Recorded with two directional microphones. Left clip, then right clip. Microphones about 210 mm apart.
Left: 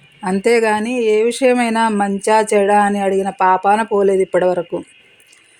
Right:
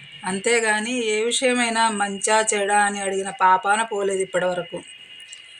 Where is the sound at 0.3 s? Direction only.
50° left (ahead or behind).